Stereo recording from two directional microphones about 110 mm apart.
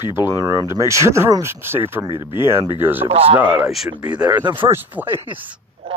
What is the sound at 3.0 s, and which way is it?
Speech, 60° right (ahead or behind).